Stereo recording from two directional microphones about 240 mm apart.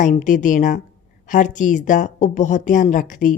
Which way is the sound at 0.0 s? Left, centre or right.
Left.